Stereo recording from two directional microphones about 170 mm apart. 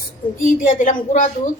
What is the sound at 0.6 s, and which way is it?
Speech, 50° left (ahead or behind).